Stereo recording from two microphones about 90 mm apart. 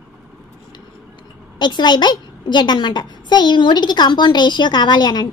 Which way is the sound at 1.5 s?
55° left (ahead or behind).